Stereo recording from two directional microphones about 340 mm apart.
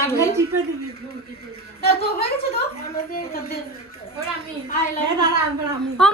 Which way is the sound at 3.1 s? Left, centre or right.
Left.